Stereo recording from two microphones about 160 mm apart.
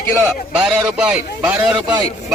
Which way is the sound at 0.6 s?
5° right (ahead or behind).